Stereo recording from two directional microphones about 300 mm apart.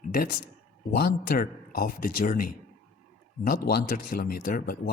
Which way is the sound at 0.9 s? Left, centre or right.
Left.